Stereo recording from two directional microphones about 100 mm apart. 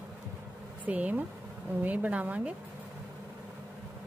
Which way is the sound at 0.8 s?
15° right (ahead or behind).